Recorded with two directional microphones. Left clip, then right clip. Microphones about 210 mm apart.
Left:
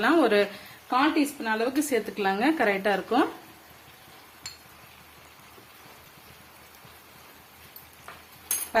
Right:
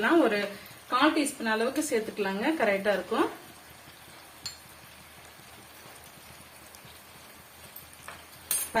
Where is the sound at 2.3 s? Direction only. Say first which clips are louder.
Left 4 dB; 50° left (ahead or behind).